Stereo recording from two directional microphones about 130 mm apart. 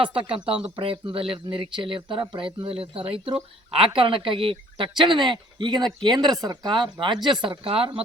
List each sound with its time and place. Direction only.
0.0 s speech: 40° right (ahead or behind)